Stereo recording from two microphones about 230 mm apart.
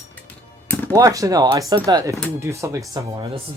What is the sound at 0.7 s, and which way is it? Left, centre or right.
Music, centre.